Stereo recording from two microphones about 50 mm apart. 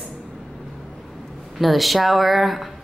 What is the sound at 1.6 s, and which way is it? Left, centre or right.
A woman's voice, centre.